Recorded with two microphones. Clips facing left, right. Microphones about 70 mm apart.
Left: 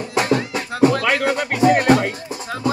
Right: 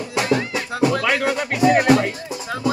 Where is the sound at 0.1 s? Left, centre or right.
Left.